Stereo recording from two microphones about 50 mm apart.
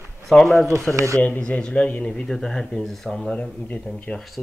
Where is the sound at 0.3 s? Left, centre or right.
Centre.